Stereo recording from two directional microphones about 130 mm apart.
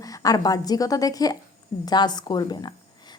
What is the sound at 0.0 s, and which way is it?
A woman's voice, 25° left (ahead or behind).